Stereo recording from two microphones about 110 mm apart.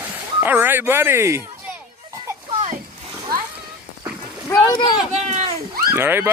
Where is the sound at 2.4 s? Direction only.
65° right (ahead or behind).